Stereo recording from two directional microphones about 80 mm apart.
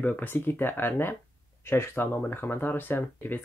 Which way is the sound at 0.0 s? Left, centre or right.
Left.